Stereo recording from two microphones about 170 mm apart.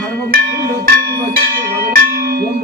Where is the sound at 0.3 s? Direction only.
60° right (ahead or behind).